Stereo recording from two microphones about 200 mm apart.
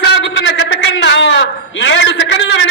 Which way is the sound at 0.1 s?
60° left (ahead or behind).